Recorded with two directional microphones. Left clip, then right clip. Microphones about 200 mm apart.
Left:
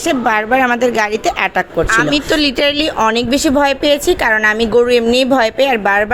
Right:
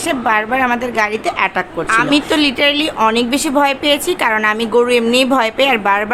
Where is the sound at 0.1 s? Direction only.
20° left (ahead or behind).